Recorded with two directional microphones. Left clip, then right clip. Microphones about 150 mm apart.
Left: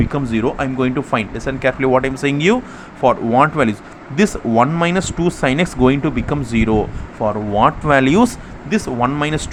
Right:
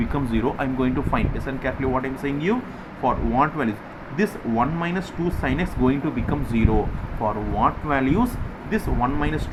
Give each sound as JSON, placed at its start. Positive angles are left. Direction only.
{"t": 0.1, "sound": "speech", "side_deg": 40}
{"t": 3.0, "sound": "speech", "side_deg": 60}
{"t": 7.6, "sound": "speech", "side_deg": 90}
{"t": 8.7, "sound": "speech", "side_deg": 65}